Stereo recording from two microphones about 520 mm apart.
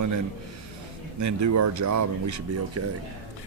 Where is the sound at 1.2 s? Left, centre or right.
Right.